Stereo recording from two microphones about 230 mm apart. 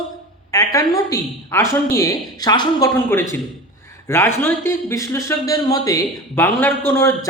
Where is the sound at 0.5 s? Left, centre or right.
Centre.